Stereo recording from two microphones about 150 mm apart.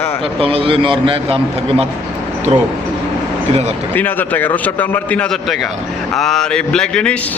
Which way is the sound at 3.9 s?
10° left (ahead or behind).